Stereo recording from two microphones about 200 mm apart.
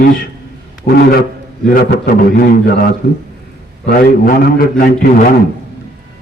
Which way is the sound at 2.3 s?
45° left (ahead or behind).